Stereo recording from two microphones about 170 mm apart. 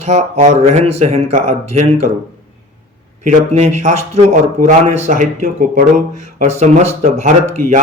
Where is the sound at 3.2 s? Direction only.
45° right (ahead or behind).